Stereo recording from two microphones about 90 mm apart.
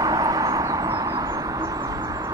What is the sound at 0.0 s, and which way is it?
Vehicle, 40° right (ahead or behind).